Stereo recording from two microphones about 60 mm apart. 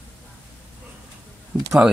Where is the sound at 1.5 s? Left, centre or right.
Right.